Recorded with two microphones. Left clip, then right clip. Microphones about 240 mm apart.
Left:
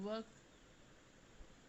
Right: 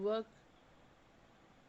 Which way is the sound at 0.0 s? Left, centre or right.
Centre.